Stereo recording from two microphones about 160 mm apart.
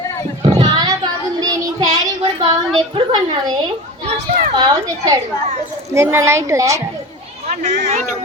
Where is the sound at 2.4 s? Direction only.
30° right (ahead or behind).